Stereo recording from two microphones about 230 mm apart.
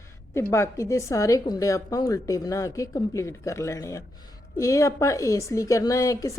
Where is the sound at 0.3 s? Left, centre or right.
Centre.